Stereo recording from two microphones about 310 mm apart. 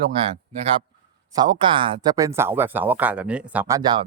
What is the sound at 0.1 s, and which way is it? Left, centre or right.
Speech, centre.